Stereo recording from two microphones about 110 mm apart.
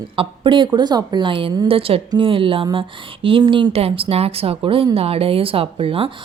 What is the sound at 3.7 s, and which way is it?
A woman's voice, 65° right (ahead or behind).